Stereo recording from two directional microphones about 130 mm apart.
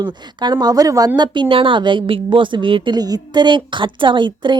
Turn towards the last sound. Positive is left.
turn(degrees=-35)  # may be behind; listen again after turning